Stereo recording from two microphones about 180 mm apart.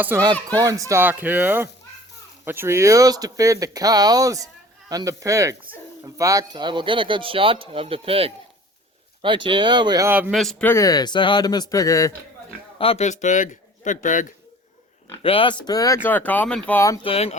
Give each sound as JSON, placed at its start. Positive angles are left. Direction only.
{"t": 0.0, "sound": "speech", "side_deg": -10}
{"t": 10.1, "sound": "speech", "side_deg": -10}
{"t": 10.3, "sound": "a man's voice", "side_deg": 0}
{"t": 12.8, "sound": "a man's voice", "side_deg": 35}
{"t": 15.2, "sound": "a man's voice", "side_deg": 30}
{"t": 16.0, "sound": "speech", "side_deg": 10}
{"t": 17.0, "sound": "speech", "side_deg": 30}